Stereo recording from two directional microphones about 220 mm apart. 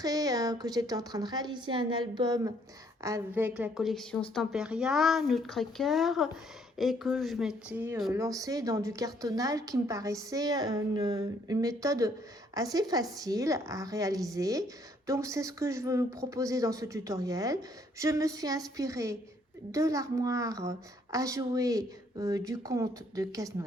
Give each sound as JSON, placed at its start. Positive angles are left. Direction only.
{"t": 0.0, "sound": "a woman's voice", "side_deg": -15}